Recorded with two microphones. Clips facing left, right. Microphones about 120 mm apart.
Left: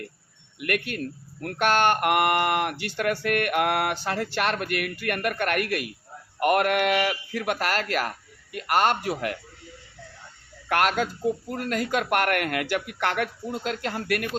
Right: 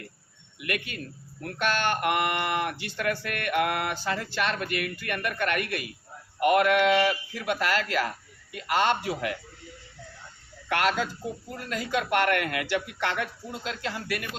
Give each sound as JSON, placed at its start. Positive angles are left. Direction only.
{"t": 0.6, "sound": "a man's voice", "side_deg": 55}
{"t": 10.7, "sound": "a man's voice", "side_deg": 55}